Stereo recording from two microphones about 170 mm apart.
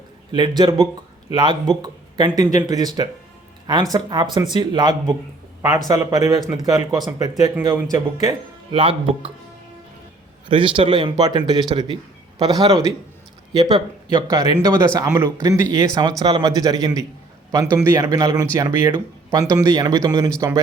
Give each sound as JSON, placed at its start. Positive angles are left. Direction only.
{"t": 0.3, "sound": "speech", "side_deg": -25}
{"t": 8.7, "sound": "speech", "side_deg": -30}
{"t": 10.5, "sound": "speech", "side_deg": -30}
{"t": 13.5, "sound": "a man's voice", "side_deg": -25}